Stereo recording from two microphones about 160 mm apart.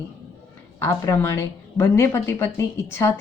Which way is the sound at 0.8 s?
20° left (ahead or behind).